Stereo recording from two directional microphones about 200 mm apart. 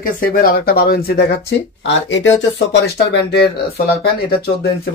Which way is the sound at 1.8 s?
65° left (ahead or behind).